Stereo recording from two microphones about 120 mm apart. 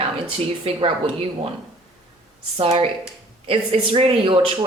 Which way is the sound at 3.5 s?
50° right (ahead or behind).